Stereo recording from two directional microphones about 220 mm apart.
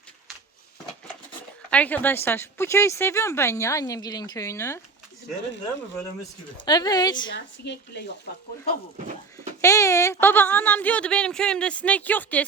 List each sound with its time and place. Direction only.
1.7 s speech: 5° left (ahead or behind)
6.7 s speech: 20° left (ahead or behind)
7.3 s a woman's voice: 55° left (ahead or behind)
9.6 s speech: 15° left (ahead or behind)